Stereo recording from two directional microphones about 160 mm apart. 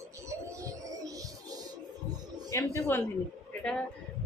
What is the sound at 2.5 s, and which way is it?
Speech, 15° left (ahead or behind).